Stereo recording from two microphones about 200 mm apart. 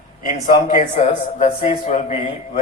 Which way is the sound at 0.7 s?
30° left (ahead or behind).